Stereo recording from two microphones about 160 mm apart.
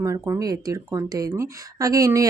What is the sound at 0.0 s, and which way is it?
Speech, 20° right (ahead or behind).